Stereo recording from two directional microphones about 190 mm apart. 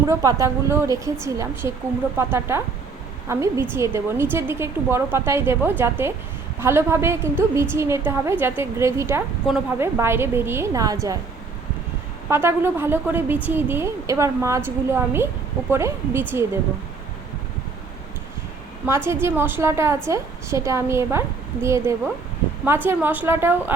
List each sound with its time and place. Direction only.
0.1 s a woman's voice: 15° right (ahead or behind)
12.3 s a woman's voice: 15° right (ahead or behind)
18.9 s a woman's voice: 15° right (ahead or behind)